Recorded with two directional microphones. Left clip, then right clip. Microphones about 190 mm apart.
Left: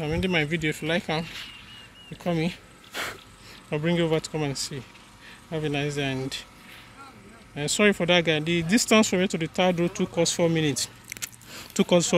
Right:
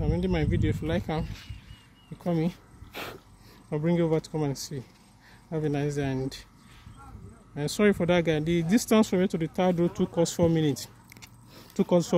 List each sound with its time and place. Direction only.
0.0 s speech: 10° right (ahead or behind)
2.2 s speech: 10° right (ahead or behind)
2.9 s a sound: 25° right (ahead or behind)
3.7 s speech: 15° right (ahead or behind)
7.5 s speech: 20° right (ahead or behind)